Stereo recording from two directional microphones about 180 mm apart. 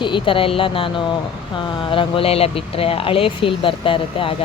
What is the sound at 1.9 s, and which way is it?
Speech, 30° left (ahead or behind).